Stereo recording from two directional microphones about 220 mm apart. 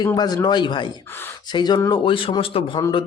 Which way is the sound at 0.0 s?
15° left (ahead or behind).